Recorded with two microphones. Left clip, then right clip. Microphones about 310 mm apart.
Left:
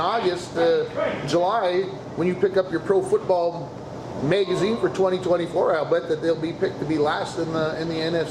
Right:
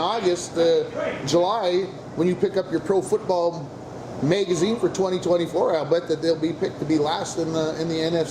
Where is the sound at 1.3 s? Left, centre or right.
Right.